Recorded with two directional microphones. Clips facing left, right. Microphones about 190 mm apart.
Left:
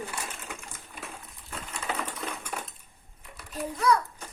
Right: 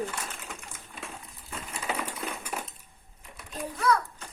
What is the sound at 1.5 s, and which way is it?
Crushing, 5° right (ahead or behind).